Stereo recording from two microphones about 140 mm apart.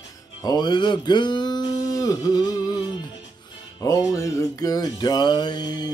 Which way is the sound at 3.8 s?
25° left (ahead or behind).